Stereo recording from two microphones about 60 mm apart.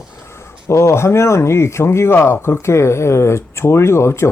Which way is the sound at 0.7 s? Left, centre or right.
Left.